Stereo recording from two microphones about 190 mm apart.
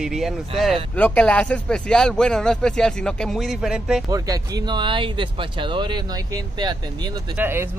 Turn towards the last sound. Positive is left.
turn(degrees=-10)  # may be behind; listen again after turning